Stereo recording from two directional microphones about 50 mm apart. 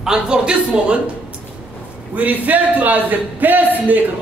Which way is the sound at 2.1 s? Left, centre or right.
Right.